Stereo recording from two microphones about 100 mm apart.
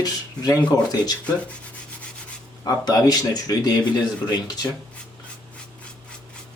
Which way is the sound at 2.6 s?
40° left (ahead or behind).